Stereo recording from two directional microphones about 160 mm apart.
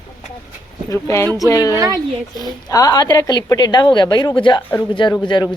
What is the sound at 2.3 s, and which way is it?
A woman's voice, 25° left (ahead or behind).